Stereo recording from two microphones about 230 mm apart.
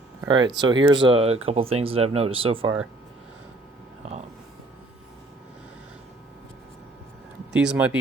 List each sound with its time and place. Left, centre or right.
0.2 s speech: centre
7.5 s speech: centre